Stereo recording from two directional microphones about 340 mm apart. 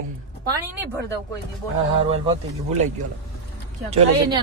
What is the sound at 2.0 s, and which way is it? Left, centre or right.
Speech, centre.